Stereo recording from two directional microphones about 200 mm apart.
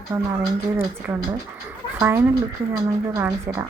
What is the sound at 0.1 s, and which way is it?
Speech, 10° right (ahead or behind).